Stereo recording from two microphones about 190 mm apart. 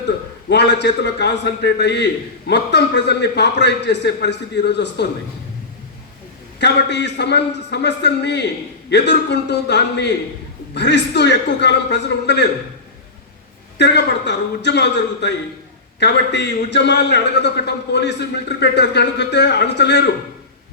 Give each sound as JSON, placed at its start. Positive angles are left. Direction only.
{"t": 0.4, "sound": "a man's voice", "side_deg": 65}
{"t": 6.6, "sound": "a man's voice", "side_deg": 65}
{"t": 13.7, "sound": "a man's voice", "side_deg": 65}